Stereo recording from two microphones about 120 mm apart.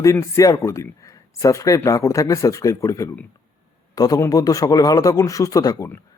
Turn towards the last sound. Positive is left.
turn(degrees=30)  # may be behind; listen again after turning